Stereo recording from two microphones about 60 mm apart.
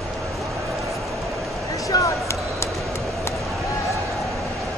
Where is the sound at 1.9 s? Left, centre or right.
Left.